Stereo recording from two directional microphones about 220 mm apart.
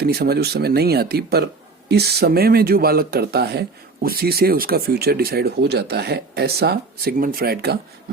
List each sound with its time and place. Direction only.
0.0 s speech: 45° right (ahead or behind)